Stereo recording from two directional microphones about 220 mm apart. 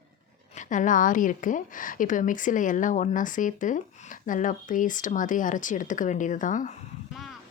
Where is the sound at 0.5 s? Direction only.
35° left (ahead or behind).